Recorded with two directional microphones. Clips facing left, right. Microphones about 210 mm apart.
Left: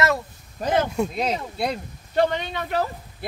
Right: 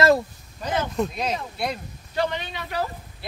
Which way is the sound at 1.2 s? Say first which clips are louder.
Left 2 dB; 30° left (ahead or behind).